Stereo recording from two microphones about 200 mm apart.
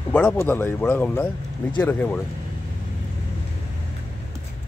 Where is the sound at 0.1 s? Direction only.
10° left (ahead or behind).